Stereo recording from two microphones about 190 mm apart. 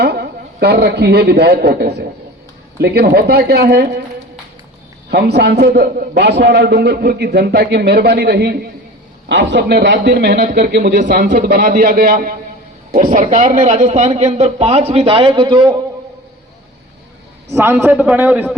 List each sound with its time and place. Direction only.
0.0 s a man's voice: 60° right (ahead or behind)
5.1 s a man's voice: 60° right (ahead or behind)
11.0 s a man's voice: 40° right (ahead or behind)
11.4 s a man's voice: 60° right (ahead or behind); by 15.8 s 25° right (ahead or behind)
17.5 s a man's voice: 15° right (ahead or behind)